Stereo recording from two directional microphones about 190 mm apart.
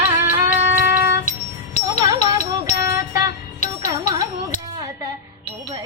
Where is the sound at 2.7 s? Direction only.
15° right (ahead or behind).